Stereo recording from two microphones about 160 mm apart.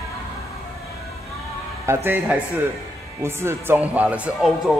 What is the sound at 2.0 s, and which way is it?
Speech, 10° right (ahead or behind).